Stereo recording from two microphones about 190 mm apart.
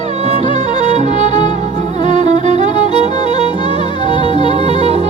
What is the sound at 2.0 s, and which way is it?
Music, 40° right (ahead or behind).